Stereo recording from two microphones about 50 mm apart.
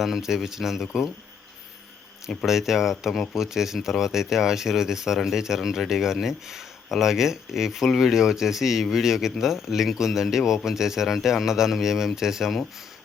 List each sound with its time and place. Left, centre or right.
0.0 s speech: centre
2.5 s speech: centre